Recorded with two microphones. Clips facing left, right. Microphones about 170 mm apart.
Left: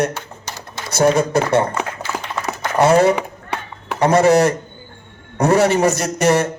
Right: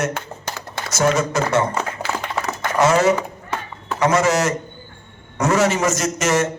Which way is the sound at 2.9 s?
35° left (ahead or behind).